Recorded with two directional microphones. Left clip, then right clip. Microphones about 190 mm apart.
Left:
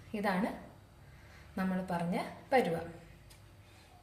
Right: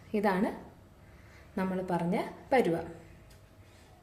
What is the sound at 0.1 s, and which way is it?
Speech, 40° right (ahead or behind).